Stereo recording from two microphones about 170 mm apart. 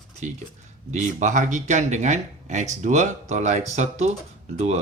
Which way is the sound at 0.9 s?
45° right (ahead or behind).